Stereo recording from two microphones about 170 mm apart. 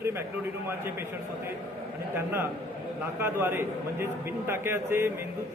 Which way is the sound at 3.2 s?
15° right (ahead or behind).